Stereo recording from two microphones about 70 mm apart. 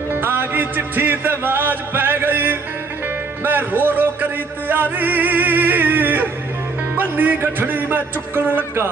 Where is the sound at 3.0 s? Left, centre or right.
Right.